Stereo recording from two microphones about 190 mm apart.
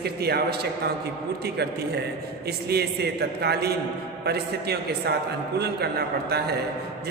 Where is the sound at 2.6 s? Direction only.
55° right (ahead or behind).